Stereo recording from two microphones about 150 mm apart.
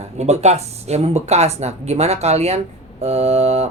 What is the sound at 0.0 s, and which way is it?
Speech, 45° right (ahead or behind).